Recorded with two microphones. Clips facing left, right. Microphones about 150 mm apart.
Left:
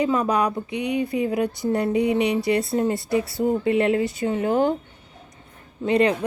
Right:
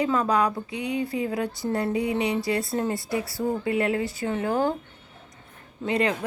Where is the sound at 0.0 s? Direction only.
15° left (ahead or behind).